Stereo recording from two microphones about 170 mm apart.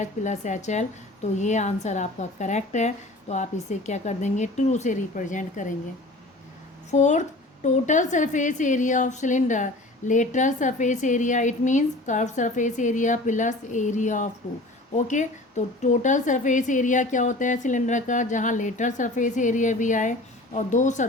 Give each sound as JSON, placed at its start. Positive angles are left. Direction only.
{"t": 0.0, "sound": "a woman's voice", "side_deg": 45}
{"t": 6.9, "sound": "a woman's voice", "side_deg": 45}